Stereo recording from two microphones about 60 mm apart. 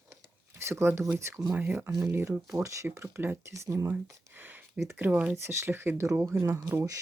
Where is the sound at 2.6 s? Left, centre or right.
Right.